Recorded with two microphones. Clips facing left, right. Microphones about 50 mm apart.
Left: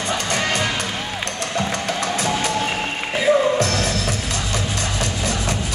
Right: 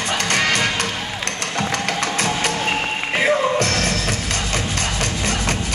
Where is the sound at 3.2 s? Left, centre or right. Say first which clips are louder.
Left 2 dB; right.